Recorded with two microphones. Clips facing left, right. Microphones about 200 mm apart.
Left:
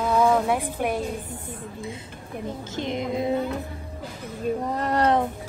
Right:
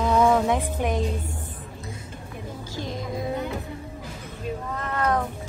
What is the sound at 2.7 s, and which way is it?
Music, 20° left (ahead or behind).